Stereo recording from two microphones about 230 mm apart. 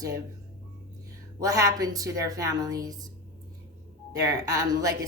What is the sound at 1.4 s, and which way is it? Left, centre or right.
A woman's voice, centre.